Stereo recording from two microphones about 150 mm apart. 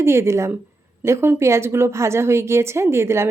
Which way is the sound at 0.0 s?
20° right (ahead or behind).